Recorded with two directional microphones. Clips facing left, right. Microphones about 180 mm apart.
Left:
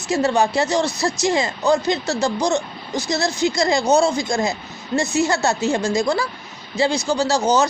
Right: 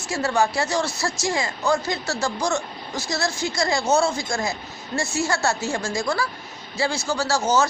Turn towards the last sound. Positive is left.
turn(degrees=20)  # may be behind; listen again after turning